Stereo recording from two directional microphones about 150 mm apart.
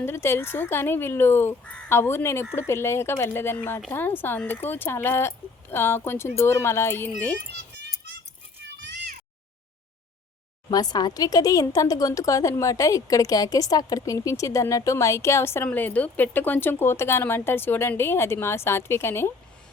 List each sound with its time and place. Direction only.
0.0 s speech: 15° left (ahead or behind)
10.7 s speech: 25° left (ahead or behind)